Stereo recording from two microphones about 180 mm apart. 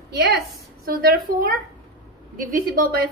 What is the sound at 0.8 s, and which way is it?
A woman's voice, 55° right (ahead or behind).